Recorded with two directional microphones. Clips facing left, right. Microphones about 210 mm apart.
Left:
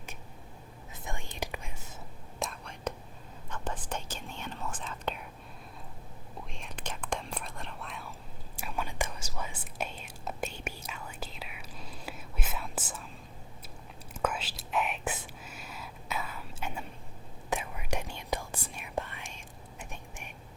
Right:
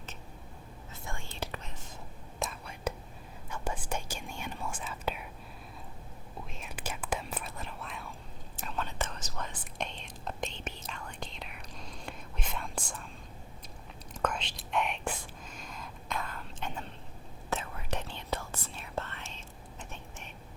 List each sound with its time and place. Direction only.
1.0 s whispering: 20° left (ahead or behind)
2.4 s whispering: 5° right (ahead or behind)
6.5 s whispering: 5° right (ahead or behind)
8.5 s whispering: 10° left (ahead or behind)
14.1 s whispering: 5° left (ahead or behind)